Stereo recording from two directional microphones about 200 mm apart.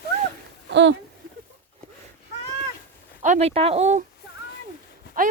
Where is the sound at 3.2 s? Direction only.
35° right (ahead or behind).